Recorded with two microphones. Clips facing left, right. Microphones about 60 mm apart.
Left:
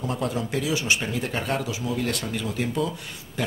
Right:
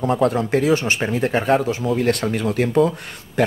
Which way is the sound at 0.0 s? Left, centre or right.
Right.